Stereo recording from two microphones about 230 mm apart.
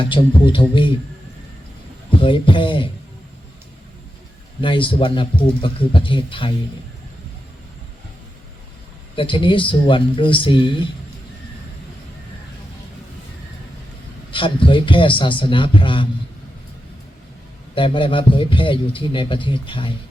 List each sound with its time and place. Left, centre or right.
0.0 s a man's voice: left
2.0 s speech: left
4.6 s a man's voice: left
9.1 s a man's voice: left
14.3 s a man's voice: left
17.7 s a man's voice: left